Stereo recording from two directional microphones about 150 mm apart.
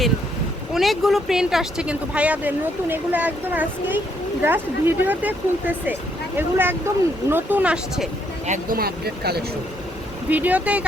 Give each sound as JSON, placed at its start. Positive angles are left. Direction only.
{"t": 0.7, "sound": "speech", "side_deg": 0}
{"t": 8.4, "sound": "speech", "side_deg": -55}
{"t": 8.8, "sound": "speech", "side_deg": -90}
{"t": 10.2, "sound": "speech", "side_deg": -10}